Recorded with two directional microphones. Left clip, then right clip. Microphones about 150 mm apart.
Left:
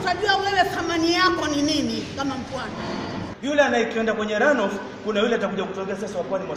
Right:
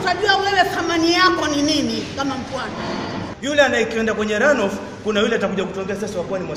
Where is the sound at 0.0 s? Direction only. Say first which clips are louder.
Right 4 dB; centre (ahead or behind).